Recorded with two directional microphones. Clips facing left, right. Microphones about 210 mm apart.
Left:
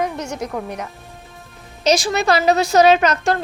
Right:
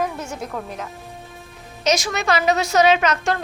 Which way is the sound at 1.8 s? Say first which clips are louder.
Left 4 dB; 35° left (ahead or behind).